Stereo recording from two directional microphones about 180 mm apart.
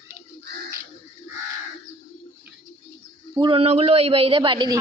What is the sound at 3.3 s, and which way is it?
Speech, 25° right (ahead or behind).